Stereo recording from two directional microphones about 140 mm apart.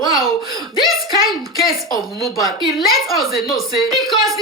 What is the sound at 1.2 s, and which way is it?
Speech, 90° left.